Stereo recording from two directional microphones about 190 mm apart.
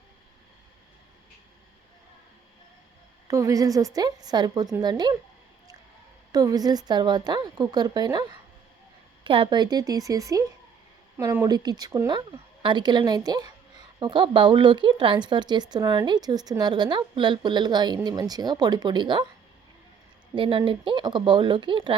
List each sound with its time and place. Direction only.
3.2 s a woman's voice: 15° right (ahead or behind)
6.3 s a woman's voice: 20° right (ahead or behind)
20.3 s a woman's voice: 25° right (ahead or behind)